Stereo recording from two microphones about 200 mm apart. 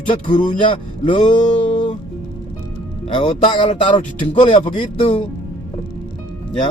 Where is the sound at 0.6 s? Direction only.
25° left (ahead or behind).